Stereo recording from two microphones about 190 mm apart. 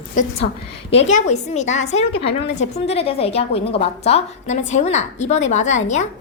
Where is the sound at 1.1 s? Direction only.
35° left (ahead or behind).